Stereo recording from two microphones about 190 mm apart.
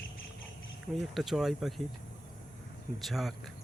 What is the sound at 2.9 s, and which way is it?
Speech, centre (ahead or behind).